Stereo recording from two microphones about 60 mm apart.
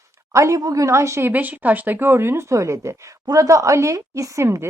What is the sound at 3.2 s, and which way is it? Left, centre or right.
Speech, right.